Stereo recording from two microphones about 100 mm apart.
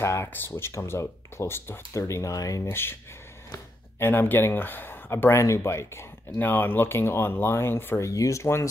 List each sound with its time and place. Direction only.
0.0 s speech: 25° left (ahead or behind)
2.7 s speech: 25° left (ahead or behind)